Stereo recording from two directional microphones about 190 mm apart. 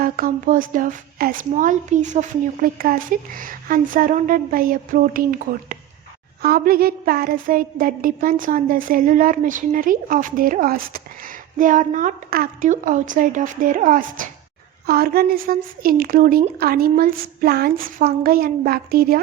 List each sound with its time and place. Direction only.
0.0 s speech: 45° right (ahead or behind)